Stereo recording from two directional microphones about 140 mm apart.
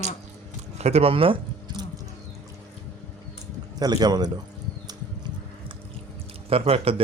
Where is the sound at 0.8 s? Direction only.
45° right (ahead or behind).